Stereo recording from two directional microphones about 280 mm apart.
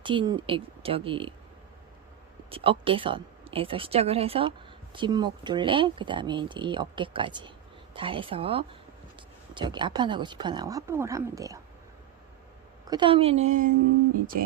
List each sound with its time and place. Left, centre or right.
0.0 s speech: centre
2.5 s speech: centre
12.9 s speech: centre